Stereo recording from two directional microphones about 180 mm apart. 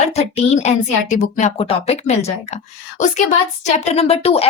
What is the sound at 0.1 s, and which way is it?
A woman's voice, 35° left (ahead or behind).